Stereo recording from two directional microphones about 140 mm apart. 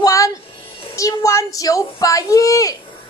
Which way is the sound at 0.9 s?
20° left (ahead or behind).